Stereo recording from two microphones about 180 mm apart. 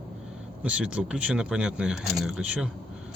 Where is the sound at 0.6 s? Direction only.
5° right (ahead or behind).